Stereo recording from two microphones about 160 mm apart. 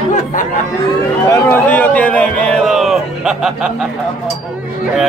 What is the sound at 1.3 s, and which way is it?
A man's voice, 15° left (ahead or behind).